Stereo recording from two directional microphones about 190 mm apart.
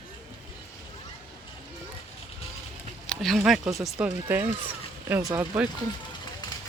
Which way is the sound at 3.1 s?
Centre (ahead or behind).